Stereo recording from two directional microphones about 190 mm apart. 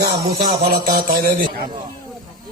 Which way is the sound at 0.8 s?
50° right (ahead or behind).